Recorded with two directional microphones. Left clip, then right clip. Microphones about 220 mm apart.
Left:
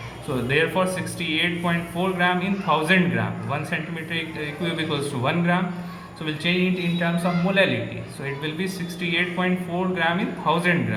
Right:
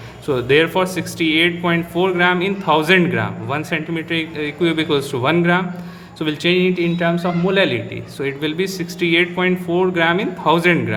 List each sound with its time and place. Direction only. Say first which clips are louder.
0.4 s speech: right 6 dB; 50° right (ahead or behind)